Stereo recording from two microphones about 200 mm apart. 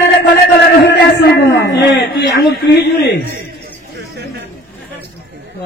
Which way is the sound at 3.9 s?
55° right (ahead or behind).